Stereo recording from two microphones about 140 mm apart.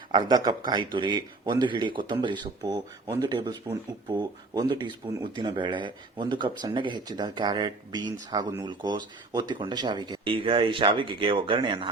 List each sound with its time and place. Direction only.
0.1 s speech: 30° right (ahead or behind)